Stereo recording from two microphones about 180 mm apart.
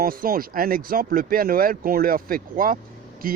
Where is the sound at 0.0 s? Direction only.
55° right (ahead or behind).